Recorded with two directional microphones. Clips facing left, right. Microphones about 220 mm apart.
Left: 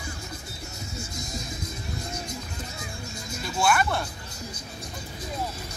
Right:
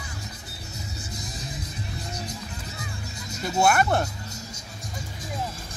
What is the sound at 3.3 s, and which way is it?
Speech, 40° right (ahead or behind).